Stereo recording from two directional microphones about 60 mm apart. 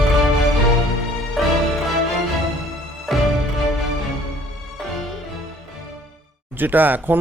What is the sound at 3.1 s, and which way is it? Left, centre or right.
Music, centre.